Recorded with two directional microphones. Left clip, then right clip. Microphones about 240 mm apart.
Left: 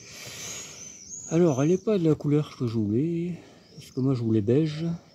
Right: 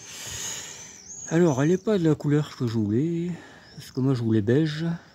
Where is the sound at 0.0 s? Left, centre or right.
Right.